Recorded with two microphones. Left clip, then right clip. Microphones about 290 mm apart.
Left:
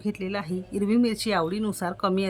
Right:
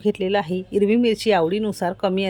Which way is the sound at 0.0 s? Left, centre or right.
Centre.